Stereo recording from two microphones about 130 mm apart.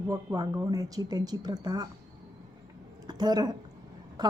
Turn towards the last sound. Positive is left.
turn(degrees=-30)  # may be behind; listen again after turning